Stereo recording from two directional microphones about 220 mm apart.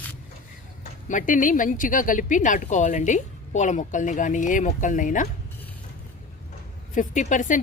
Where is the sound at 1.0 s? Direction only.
35° left (ahead or behind).